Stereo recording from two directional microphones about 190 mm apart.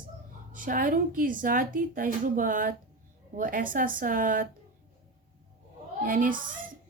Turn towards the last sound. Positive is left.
turn(degrees=-45)  # may be behind; listen again after turning